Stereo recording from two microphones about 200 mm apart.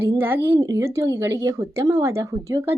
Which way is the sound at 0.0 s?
10° right (ahead or behind).